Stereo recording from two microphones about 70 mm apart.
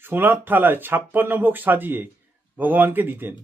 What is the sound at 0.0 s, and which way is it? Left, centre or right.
Speech, right.